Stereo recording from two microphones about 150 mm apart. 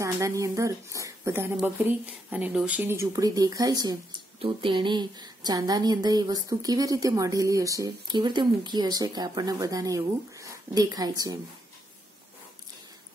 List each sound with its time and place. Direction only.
0.0 s a woman's voice: 20° right (ahead or behind)